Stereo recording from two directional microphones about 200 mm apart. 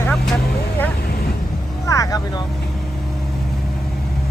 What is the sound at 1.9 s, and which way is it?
Vehicle, 15° left (ahead or behind).